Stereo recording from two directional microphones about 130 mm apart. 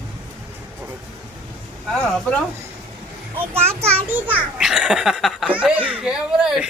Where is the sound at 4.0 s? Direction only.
15° right (ahead or behind).